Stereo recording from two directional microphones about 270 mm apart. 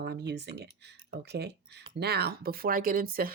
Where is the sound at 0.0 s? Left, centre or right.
Right.